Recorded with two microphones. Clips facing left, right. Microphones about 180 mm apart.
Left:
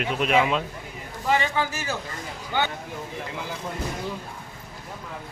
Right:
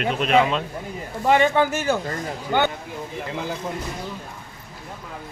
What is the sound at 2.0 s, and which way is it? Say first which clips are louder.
Speech: right 8 dB; 50° right (ahead or behind).